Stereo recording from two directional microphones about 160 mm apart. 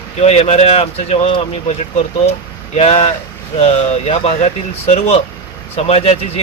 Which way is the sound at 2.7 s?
40° left (ahead or behind).